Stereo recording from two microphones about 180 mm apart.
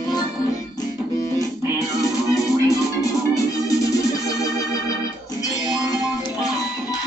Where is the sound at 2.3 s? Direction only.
20° left (ahead or behind).